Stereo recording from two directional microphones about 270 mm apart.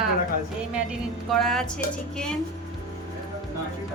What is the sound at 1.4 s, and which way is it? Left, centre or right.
Speech, centre.